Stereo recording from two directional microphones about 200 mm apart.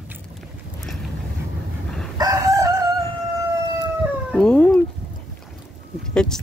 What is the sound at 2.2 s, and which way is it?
Chicken, 20° right (ahead or behind).